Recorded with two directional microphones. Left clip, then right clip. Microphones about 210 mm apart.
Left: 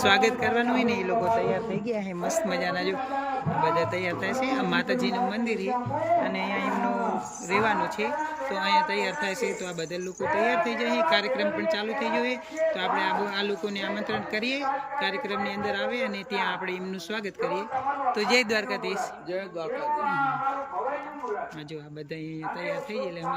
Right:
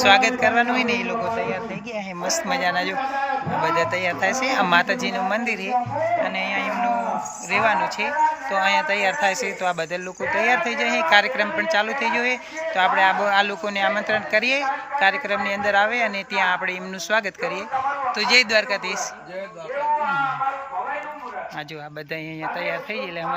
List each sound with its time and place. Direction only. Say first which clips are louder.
0.0 s a man's voice: right 6 dB; 15° left (ahead or behind)
2.5 s a man's voice: right 6 dB; 10° left (ahead or behind)
22.6 s a man's voice: right 2 dB; 5° left (ahead or behind)